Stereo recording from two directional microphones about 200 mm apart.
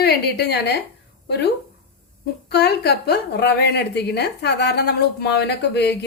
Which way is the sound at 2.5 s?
55° left (ahead or behind).